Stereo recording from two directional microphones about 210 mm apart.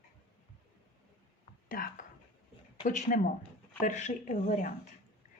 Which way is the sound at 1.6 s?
40° left (ahead or behind).